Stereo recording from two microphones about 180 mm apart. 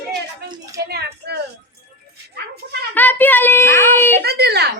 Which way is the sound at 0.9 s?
65° right (ahead or behind).